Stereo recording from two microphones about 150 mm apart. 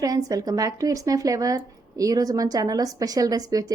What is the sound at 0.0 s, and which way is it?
Speech, 25° right (ahead or behind).